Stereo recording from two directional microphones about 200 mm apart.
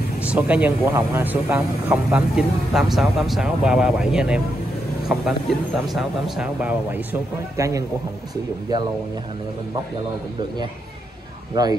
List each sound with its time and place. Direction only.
0.2 s speech: 5° right (ahead or behind)
11.6 s speech: 20° right (ahead or behind)